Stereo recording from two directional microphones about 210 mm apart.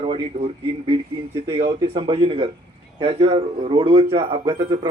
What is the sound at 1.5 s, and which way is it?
A man's voice, 25° right (ahead or behind).